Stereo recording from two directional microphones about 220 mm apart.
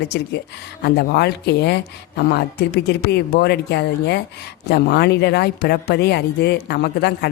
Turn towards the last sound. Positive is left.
turn(degrees=45)  # may be behind; listen again after turning